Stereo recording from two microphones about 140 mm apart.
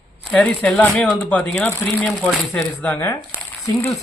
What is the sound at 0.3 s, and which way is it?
Speech, 10° left (ahead or behind).